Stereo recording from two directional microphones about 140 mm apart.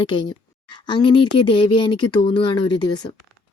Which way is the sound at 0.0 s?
35° left (ahead or behind).